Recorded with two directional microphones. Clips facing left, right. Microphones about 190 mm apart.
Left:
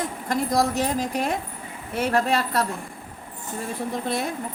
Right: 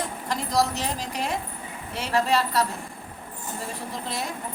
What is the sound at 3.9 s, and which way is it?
Speech, 55° left (ahead or behind).